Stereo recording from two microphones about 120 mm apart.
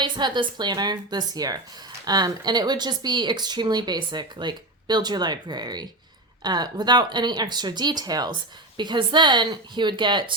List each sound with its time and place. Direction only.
0.0 s speech: 40° right (ahead or behind)